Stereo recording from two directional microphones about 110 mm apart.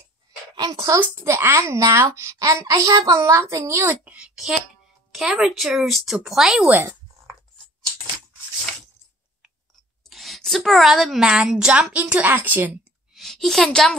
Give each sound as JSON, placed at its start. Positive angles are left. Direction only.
{"t": 0.7, "sound": "a woman's voice", "side_deg": -25}
{"t": 6.7, "sound": "a sound", "side_deg": -20}
{"t": 10.0, "sound": "a woman's voice", "side_deg": 0}
{"t": 13.1, "sound": "a woman's voice", "side_deg": 0}